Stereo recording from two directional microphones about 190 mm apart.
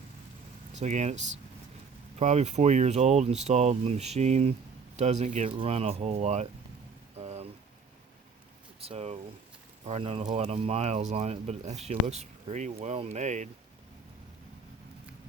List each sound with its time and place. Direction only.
0.8 s speech: 40° right (ahead or behind)
7.2 s rain on surface: 35° right (ahead or behind)
8.8 s speech: 30° right (ahead or behind)